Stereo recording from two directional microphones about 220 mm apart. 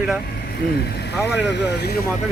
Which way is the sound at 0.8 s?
45° left (ahead or behind).